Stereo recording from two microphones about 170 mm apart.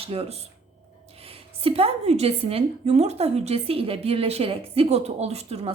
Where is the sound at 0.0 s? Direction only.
35° right (ahead or behind).